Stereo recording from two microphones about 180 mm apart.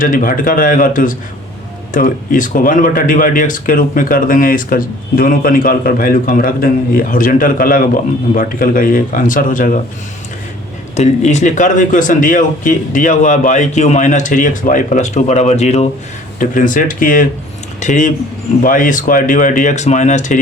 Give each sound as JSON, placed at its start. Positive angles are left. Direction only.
{"t": 0.0, "sound": "speech", "side_deg": 50}
{"t": 10.9, "sound": "speech", "side_deg": 40}
{"t": 16.4, "sound": "speech", "side_deg": 50}